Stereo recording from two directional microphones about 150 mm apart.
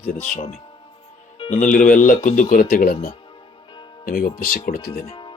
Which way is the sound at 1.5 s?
55° left (ahead or behind).